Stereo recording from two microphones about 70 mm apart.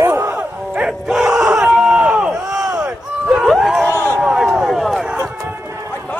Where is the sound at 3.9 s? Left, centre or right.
Left.